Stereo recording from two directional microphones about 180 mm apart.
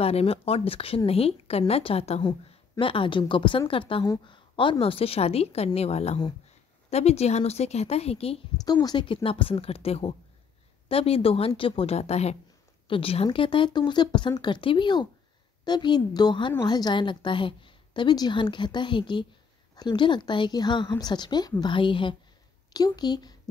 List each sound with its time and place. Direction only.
0.0 s a woman's voice: 35° left (ahead or behind)